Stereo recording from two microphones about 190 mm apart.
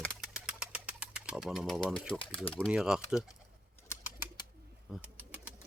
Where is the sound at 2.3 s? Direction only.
5° left (ahead or behind).